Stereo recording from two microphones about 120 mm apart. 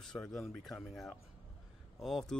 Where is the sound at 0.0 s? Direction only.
5° left (ahead or behind).